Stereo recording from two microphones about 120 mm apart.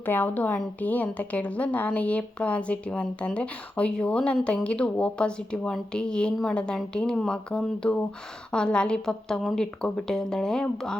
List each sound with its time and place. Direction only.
0.0 s a woman's voice: 15° left (ahead or behind)